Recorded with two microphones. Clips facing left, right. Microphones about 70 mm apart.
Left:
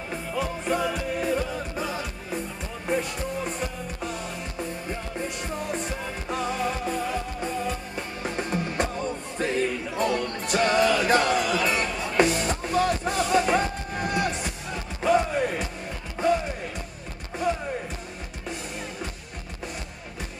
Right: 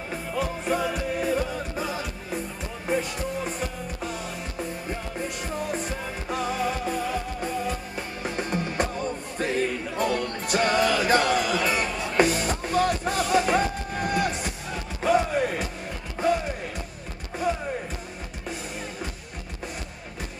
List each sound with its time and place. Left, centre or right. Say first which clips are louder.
0.1 s music: even; centre